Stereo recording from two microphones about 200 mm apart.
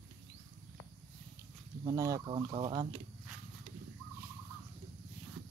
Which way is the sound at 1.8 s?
15° right (ahead or behind).